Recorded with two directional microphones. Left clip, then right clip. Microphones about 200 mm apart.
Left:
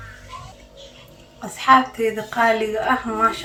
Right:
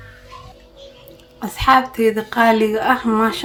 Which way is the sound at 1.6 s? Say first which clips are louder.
Right 1 dB; 50° right (ahead or behind).